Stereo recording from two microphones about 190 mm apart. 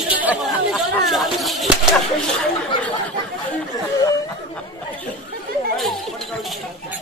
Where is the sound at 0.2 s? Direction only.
5° right (ahead or behind).